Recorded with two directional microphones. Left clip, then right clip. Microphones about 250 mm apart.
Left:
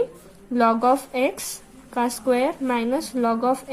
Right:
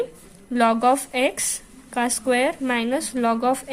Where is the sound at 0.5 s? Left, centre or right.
Right.